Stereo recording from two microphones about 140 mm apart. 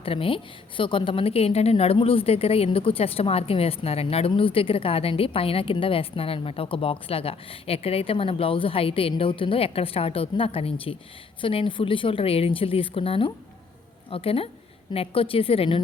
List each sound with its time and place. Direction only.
0.0 s a woman's voice: 40° left (ahead or behind)